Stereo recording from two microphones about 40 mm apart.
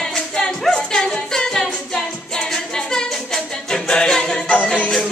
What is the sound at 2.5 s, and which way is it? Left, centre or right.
A capella, centre.